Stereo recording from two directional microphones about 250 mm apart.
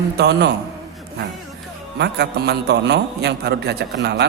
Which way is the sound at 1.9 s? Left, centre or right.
Right.